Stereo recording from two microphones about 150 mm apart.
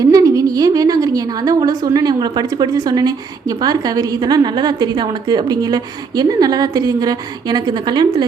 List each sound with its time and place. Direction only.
0.0 s a woman's voice: 25° right (ahead or behind)